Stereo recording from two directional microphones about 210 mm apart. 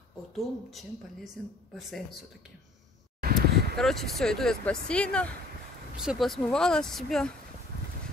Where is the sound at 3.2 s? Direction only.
50° right (ahead or behind).